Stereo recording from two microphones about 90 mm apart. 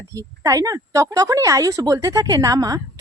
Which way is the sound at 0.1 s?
40° right (ahead or behind).